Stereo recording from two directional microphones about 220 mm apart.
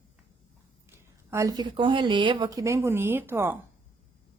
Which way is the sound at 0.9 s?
10° right (ahead or behind).